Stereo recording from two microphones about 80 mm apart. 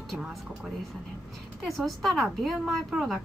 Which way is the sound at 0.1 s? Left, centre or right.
Centre.